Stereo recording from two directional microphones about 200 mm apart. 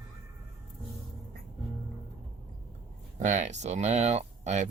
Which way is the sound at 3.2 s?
35° right (ahead or behind).